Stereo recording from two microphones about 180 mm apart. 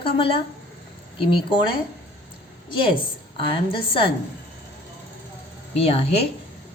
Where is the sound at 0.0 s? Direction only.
30° left (ahead or behind).